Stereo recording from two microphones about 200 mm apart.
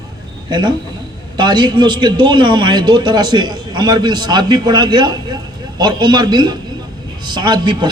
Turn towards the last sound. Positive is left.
turn(degrees=-20)  # may be behind; listen again after turning